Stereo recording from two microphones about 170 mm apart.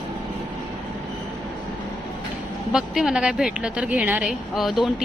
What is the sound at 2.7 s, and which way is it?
Speech, centre (ahead or behind).